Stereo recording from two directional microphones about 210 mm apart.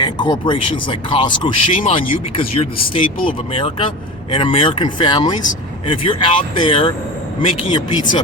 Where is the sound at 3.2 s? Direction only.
25° left (ahead or behind).